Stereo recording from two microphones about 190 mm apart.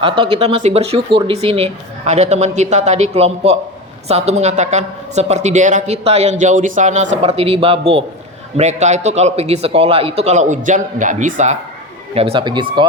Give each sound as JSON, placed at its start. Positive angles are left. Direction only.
{"t": 0.0, "sound": "speech", "side_deg": -30}
{"t": 12.1, "sound": "speech", "side_deg": -30}